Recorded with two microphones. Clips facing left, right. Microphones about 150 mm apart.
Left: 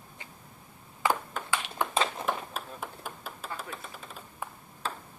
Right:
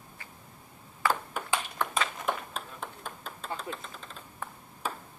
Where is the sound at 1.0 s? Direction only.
20° left (ahead or behind).